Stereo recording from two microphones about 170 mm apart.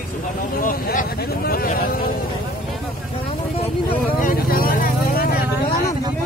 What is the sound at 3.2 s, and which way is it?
Vehicle, 35° left (ahead or behind).